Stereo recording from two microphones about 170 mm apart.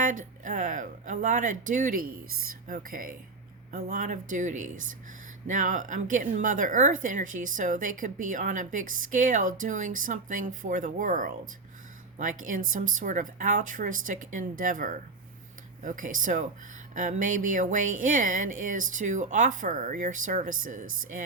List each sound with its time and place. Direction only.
0.0 s speech: 50° right (ahead or behind)